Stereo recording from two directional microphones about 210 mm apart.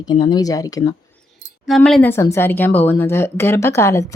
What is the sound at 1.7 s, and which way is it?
Speech, centre (ahead or behind).